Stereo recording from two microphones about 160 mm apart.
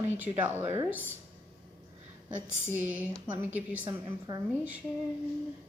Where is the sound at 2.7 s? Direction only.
10° right (ahead or behind).